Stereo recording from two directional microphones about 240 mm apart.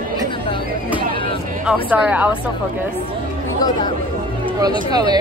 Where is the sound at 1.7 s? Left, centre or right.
Centre.